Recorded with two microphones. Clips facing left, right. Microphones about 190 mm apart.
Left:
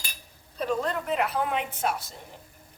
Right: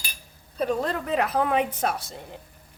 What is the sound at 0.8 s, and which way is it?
Speech, 40° right (ahead or behind).